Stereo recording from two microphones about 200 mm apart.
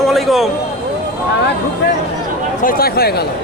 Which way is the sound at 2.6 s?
50° left (ahead or behind).